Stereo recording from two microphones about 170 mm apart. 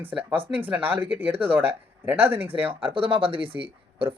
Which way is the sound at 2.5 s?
35° right (ahead or behind).